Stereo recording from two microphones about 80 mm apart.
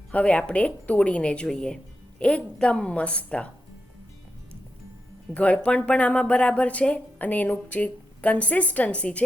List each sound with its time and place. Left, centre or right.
0.1 s speech: centre
5.3 s speech: centre